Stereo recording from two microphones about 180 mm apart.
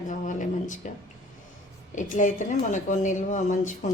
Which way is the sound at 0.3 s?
45° left (ahead or behind).